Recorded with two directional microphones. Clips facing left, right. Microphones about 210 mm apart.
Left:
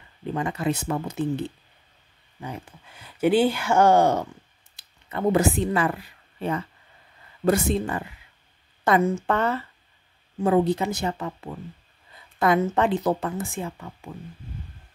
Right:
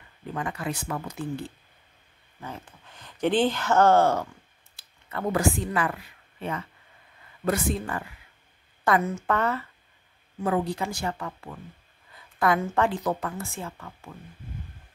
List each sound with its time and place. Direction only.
0.3 s speech: 25° left (ahead or behind)
7.4 s speech: 25° left (ahead or behind)
13.4 s speech: 15° left (ahead or behind)